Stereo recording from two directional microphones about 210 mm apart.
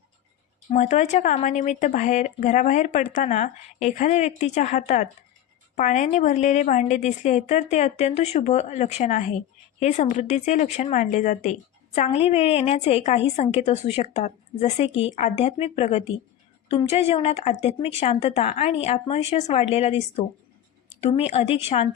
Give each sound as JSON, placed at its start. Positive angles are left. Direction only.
{"t": 0.7, "sound": "a woman's voice", "side_deg": 35}